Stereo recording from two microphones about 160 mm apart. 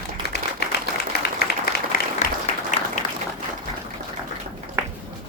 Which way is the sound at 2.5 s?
45° left (ahead or behind).